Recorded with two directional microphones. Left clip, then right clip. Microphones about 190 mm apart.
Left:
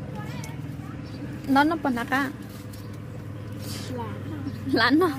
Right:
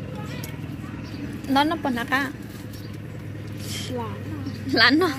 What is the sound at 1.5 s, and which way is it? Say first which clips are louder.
Speech: even; 15° left (ahead or behind).